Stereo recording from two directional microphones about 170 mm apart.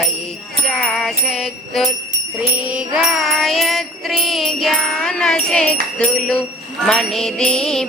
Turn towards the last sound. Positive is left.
turn(degrees=5)  # may be behind; listen again after turning